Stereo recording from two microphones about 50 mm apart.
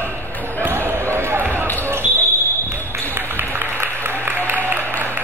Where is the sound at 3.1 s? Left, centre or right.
Right.